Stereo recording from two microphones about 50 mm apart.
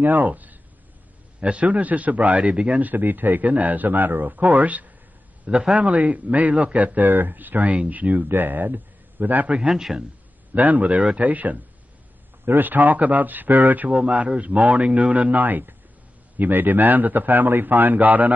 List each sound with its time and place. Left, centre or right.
0.0 s speech: right
1.4 s speech: right
2.9 s speech: right
5.5 s a man's voice: centre
5.8 s speech: right
9.7 s a man's voice: centre
10.5 s speech: right